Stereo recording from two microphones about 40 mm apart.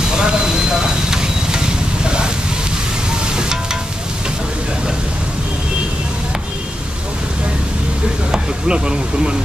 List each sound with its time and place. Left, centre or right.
0.1 s sizzle: right
8.3 s speech: right